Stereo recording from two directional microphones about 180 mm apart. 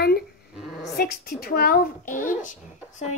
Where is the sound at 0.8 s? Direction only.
60° left (ahead or behind).